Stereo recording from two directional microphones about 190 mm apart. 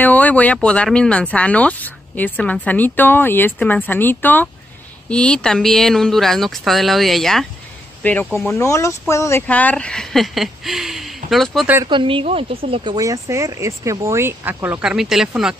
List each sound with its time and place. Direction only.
0.0 s speech: 10° left (ahead or behind)
8.5 s speech: 15° left (ahead or behind); by 11.7 s centre (ahead or behind)
11.7 s speech: 20° right (ahead or behind); by 15.5 s centre (ahead or behind)